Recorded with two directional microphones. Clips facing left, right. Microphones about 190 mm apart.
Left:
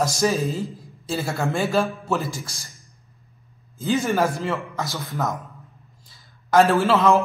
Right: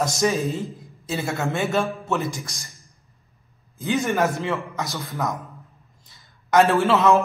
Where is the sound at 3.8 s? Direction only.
Centre (ahead or behind).